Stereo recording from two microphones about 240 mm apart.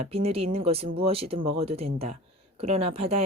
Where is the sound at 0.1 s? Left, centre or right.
Right.